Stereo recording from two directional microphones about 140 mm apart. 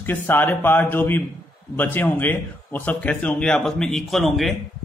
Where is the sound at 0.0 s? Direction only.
15° left (ahead or behind).